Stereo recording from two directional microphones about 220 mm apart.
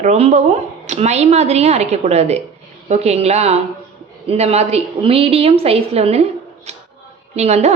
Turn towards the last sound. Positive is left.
turn(degrees=-30)  # may be behind; listen again after turning